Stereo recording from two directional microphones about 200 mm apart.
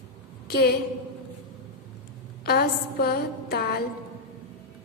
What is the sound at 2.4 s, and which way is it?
A woman's voice, 50° left (ahead or behind).